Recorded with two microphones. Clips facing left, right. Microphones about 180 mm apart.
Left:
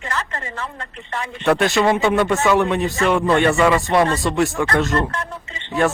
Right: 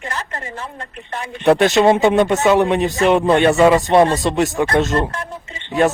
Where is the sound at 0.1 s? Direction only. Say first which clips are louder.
Left 3 dB; 30° right (ahead or behind).